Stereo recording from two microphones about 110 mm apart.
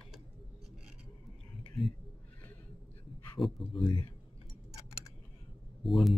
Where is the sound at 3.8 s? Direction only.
45° left (ahead or behind).